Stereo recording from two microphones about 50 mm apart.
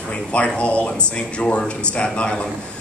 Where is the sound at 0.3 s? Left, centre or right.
Left.